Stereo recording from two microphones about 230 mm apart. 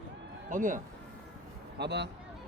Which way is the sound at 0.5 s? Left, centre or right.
Right.